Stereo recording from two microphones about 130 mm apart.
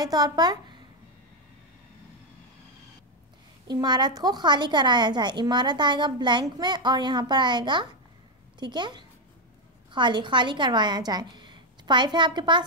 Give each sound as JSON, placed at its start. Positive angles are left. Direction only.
{"t": 0.0, "sound": "a woman's voice", "side_deg": -30}
{"t": 3.6, "sound": "a woman's voice", "side_deg": -35}